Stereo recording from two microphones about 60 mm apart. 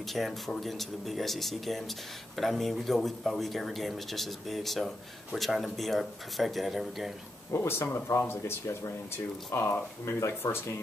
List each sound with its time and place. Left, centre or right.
0.0 s speech: centre
7.5 s speech: left